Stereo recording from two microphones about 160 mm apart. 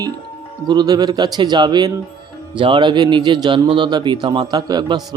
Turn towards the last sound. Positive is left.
turn(degrees=-25)  # may be behind; listen again after turning